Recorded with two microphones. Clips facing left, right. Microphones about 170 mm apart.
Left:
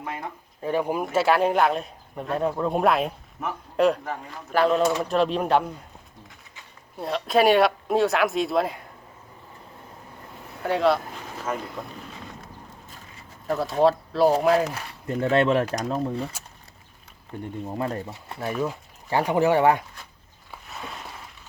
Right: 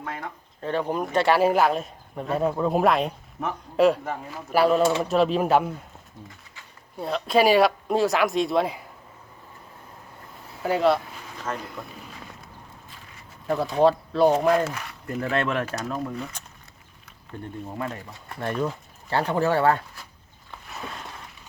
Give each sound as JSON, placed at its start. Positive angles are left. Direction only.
{"t": 0.0, "sound": "speech", "side_deg": 15}
{"t": 7.0, "sound": "speech", "side_deg": 0}
{"t": 10.6, "sound": "speech", "side_deg": 0}
{"t": 13.5, "sound": "speech", "side_deg": 0}
{"t": 15.0, "sound": "speech", "side_deg": 30}
{"t": 17.3, "sound": "speech", "side_deg": 15}
{"t": 18.3, "sound": "speech", "side_deg": 5}
{"t": 20.5, "sound": "a sound", "side_deg": 0}